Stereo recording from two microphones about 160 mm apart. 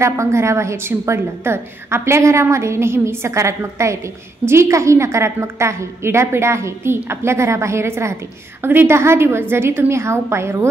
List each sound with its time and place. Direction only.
0.0 s a woman's voice: 15° right (ahead or behind)